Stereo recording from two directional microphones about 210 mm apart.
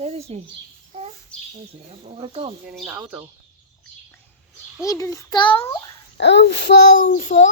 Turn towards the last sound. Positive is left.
turn(degrees=35)  # may be behind; listen again after turning